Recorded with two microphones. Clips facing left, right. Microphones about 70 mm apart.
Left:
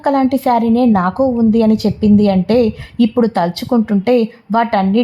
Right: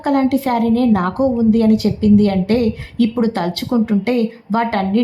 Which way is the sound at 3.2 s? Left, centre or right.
Left.